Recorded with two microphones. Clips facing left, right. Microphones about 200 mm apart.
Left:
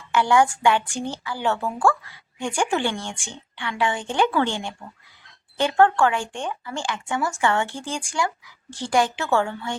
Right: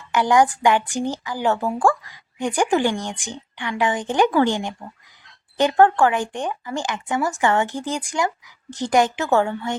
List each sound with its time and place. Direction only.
0.1 s a woman's voice: 15° right (ahead or behind)